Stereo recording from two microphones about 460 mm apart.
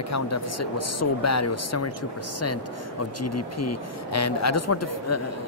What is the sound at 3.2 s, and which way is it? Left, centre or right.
Speech, left.